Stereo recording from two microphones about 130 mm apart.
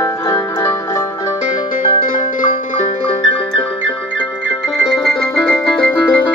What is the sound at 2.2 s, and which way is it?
Music, 85° left.